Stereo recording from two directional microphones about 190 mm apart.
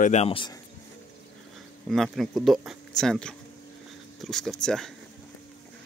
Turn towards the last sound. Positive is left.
turn(degrees=5)  # may be behind; listen again after turning